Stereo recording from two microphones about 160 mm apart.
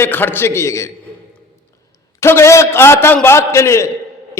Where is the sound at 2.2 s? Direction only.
15° left (ahead or behind).